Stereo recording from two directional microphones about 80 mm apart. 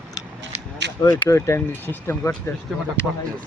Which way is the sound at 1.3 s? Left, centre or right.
Left.